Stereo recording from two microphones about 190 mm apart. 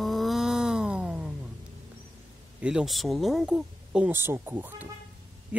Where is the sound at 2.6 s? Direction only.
5° right (ahead or behind).